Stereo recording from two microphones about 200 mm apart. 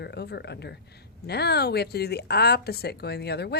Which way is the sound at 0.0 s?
55° left (ahead or behind).